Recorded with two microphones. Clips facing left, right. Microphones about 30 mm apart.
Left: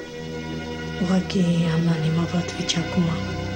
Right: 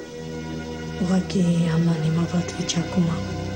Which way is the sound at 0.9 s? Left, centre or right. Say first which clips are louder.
Even; left.